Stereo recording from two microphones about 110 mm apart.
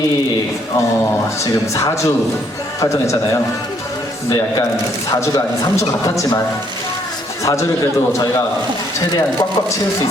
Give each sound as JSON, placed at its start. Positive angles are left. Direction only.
{"t": 1.7, "sound": "a man's voice", "side_deg": 30}
{"t": 5.1, "sound": "a man's voice", "side_deg": 30}